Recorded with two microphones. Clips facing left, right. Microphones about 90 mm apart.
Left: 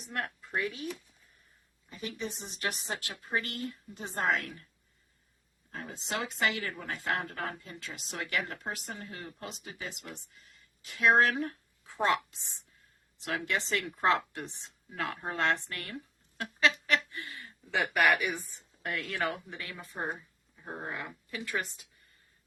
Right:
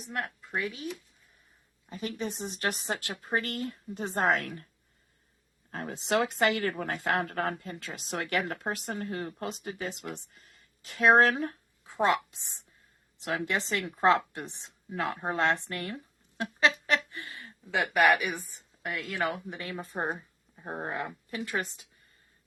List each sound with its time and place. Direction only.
0.0 s speech: centre (ahead or behind)
1.9 s speech: 40° right (ahead or behind)
5.7 s speech: 55° right (ahead or behind)
6.7 s a woman's voice: 60° right (ahead or behind); by 16.0 s 25° right (ahead or behind)
16.4 s a sound: 25° right (ahead or behind)
17.7 s speech: 15° right (ahead or behind)
18.5 s a woman's voice: 5° right (ahead or behind)
19.3 s a woman's voice: 20° right (ahead or behind)